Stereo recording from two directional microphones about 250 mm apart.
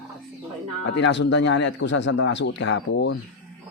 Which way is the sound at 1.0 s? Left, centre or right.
Left.